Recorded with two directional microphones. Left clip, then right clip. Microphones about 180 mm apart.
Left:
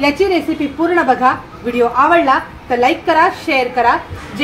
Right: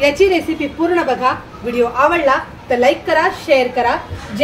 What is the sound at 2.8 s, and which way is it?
Speech, 45° left (ahead or behind).